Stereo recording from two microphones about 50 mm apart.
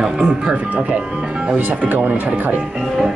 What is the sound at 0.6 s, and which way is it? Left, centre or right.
Speech, right.